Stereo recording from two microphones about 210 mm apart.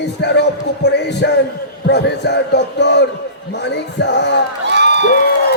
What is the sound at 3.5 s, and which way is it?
Music, 55° left (ahead or behind).